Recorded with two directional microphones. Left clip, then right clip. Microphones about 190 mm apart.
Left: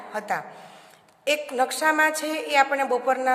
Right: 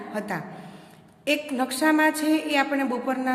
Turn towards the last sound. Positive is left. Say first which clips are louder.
# left 4 dB
turn(degrees=35)  # may be behind; listen again after turning